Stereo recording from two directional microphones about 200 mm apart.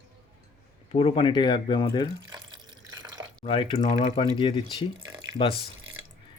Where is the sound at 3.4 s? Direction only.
25° left (ahead or behind).